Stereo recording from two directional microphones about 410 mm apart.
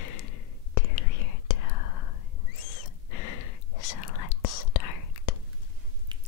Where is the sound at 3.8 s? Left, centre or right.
Left.